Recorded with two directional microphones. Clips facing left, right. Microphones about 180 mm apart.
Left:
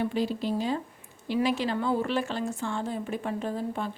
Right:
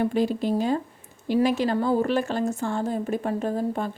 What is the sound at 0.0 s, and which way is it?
Speech, 50° right (ahead or behind).